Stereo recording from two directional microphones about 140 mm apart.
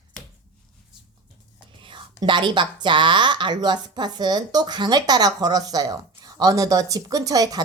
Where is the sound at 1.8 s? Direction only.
35° right (ahead or behind).